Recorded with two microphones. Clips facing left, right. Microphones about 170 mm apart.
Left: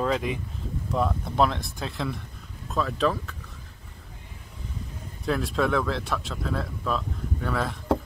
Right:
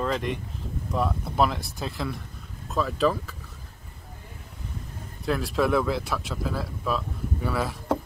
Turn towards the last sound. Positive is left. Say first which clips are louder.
# even
turn(degrees=-5)  # may be behind; listen again after turning